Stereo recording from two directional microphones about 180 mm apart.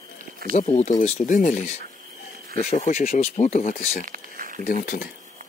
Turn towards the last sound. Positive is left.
turn(degrees=55)  # may be behind; listen again after turning